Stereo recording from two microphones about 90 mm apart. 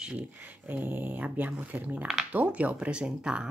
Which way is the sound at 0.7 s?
20° right (ahead or behind).